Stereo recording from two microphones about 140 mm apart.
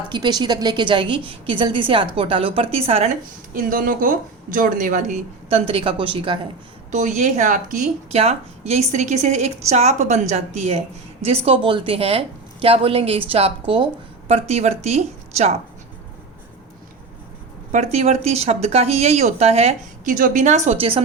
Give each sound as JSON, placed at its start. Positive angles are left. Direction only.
{"t": 0.1, "sound": "a woman's voice", "side_deg": -30}
{"t": 3.5, "sound": "speech", "side_deg": -85}
{"t": 6.9, "sound": "speech", "side_deg": -60}
{"t": 8.1, "sound": "a woman's voice", "side_deg": -50}
{"t": 17.7, "sound": "a woman's voice", "side_deg": -55}
{"t": 20.1, "sound": "a woman's voice", "side_deg": -70}
{"t": 20.7, "sound": "a woman's voice", "side_deg": -40}